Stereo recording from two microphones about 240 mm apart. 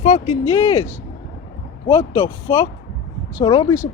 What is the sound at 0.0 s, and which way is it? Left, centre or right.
Speech, left.